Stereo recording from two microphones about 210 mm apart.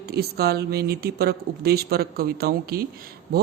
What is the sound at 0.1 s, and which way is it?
A woman's voice, 50° right (ahead or behind).